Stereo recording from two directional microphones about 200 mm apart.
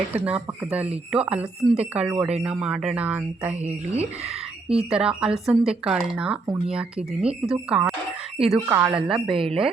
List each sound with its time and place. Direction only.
0.1 s speech: 5° right (ahead or behind)
3.5 s speech: 35° right (ahead or behind)
4.8 s speech: 5° right (ahead or behind)
9.3 s speech: 25° right (ahead or behind)